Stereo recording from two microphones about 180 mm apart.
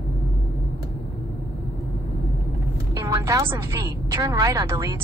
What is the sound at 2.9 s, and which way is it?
A woman's voice, 15° right (ahead or behind).